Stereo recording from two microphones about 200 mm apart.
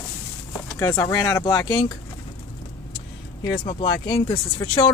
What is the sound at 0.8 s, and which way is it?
Speech, 15° left (ahead or behind).